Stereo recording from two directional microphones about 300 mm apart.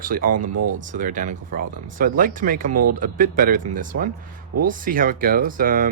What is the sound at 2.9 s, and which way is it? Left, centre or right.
Speech, right.